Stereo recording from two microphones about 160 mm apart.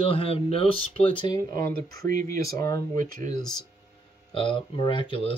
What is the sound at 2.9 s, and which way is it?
Speech, 60° right (ahead or behind).